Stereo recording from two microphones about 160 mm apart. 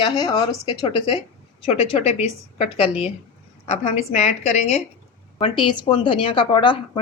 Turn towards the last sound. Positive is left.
turn(degrees=30)  # may be behind; listen again after turning